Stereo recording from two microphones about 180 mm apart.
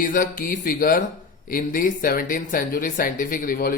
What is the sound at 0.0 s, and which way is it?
Speech, 50° left (ahead or behind).